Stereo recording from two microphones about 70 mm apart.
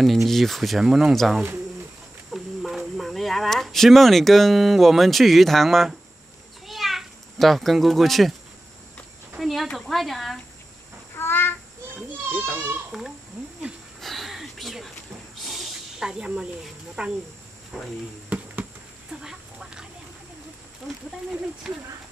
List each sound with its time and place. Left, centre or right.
0.3 s speech: centre
6.6 s a sound: centre
9.4 s cricket: centre
9.8 s speech: centre
11.1 s child singing: left
12.5 s a sound: right
14.0 s a sound: centre
15.4 s snake: centre
17.0 s speech: centre
17.7 s speech: centre
18.3 s insect: right
19.2 s duck: centre
21.7 s speech: centre